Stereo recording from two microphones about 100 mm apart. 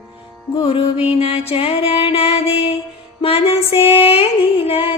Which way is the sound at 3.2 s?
75° left (ahead or behind).